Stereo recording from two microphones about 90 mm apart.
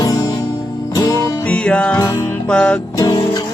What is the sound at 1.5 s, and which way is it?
Music, 15° left (ahead or behind).